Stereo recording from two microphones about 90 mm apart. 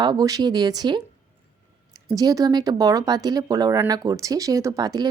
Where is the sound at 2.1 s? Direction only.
45° right (ahead or behind).